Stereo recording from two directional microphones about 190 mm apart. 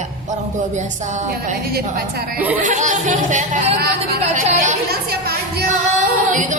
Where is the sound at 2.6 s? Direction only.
40° right (ahead or behind).